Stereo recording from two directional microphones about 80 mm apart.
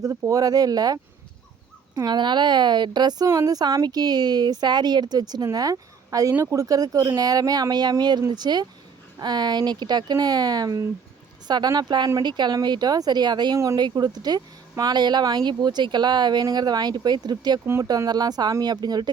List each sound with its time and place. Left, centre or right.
0.0 s speech: right
2.0 s a woman's voice: right
3.2 s a woman's voice: right
11.4 s a woman's voice: right